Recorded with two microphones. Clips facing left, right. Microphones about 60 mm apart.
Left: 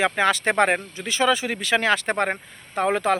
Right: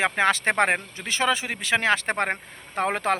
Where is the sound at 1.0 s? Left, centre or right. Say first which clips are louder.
Left 3 dB; right.